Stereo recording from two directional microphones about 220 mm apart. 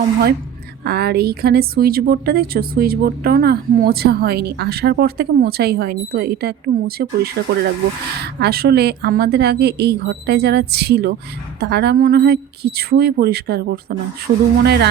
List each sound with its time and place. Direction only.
0.9 s a woman's voice: 45° right (ahead or behind)